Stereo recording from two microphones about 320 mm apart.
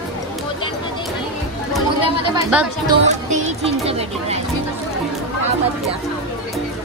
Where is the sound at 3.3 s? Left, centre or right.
Right.